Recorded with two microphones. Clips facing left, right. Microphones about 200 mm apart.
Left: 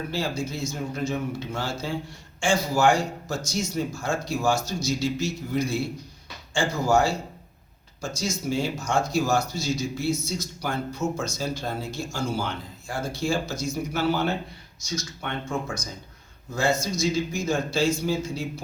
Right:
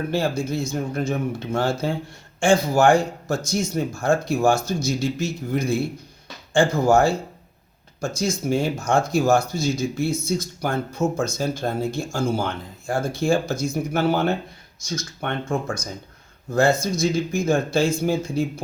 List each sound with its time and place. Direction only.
0.1 s speech: 55° right (ahead or behind)